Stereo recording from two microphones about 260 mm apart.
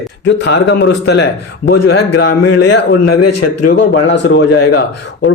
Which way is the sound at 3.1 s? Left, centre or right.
Left.